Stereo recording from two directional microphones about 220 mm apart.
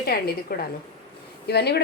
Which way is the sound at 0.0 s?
45° left (ahead or behind).